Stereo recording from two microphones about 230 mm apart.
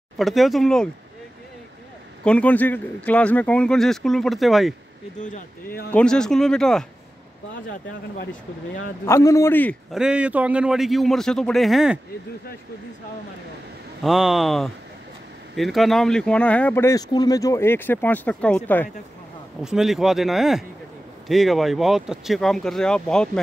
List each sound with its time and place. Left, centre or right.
0.2 s speech: centre
2.2 s speech: centre
5.2 s speech: left
5.9 s speech: centre
8.2 s speech: left
9.0 s speech: centre
9.9 s speech: centre
14.0 s speech: centre